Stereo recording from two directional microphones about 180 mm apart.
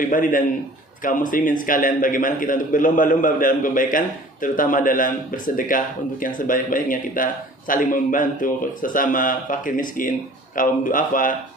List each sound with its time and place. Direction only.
0.0 s a man's voice: 50° left (ahead or behind)